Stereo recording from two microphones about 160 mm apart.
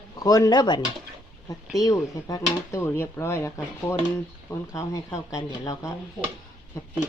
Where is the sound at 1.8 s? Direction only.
25° left (ahead or behind).